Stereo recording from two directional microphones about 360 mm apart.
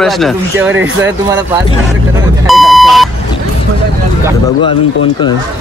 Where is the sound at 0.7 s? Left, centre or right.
Right.